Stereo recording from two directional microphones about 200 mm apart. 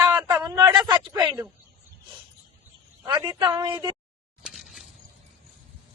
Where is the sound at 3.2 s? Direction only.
20° right (ahead or behind).